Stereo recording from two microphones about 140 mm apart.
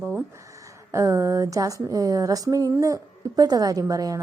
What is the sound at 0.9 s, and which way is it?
A woman's voice, 20° right (ahead or behind).